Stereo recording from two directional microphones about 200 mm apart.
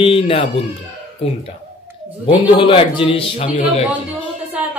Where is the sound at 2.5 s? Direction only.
25° left (ahead or behind).